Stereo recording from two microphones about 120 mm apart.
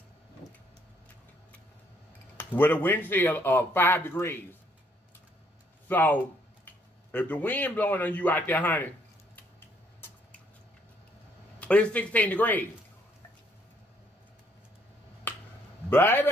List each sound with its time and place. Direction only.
2.3 s speech: 15° left (ahead or behind)
5.9 s a man's voice: 15° left (ahead or behind)
9.3 s a sound: 15° left (ahead or behind)
11.6 s speech: 10° left (ahead or behind)
15.3 s finger snapping: 15° left (ahead or behind)
15.9 s a man's voice: 20° left (ahead or behind)